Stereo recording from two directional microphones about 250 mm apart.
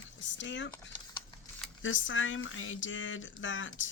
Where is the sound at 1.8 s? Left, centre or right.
Left.